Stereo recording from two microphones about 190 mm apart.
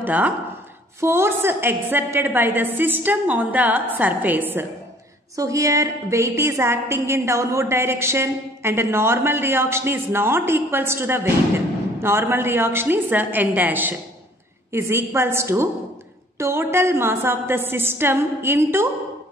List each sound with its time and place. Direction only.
0.0 s a woman's voice: 10° right (ahead or behind)